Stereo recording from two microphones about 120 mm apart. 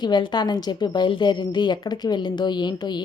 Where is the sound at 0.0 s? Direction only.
40° left (ahead or behind).